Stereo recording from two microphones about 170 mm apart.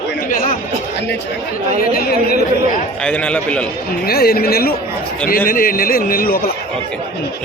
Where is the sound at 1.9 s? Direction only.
65° left (ahead or behind).